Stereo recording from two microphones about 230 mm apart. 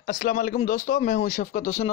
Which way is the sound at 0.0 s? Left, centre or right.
Left.